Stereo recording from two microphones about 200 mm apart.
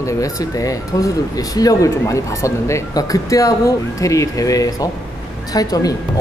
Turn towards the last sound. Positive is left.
turn(degrees=20)  # may be behind; listen again after turning